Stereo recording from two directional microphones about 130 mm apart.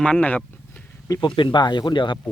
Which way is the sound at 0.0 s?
10° left (ahead or behind).